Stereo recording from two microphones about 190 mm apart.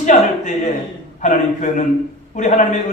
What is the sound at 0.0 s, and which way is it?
Speech, 40° left (ahead or behind).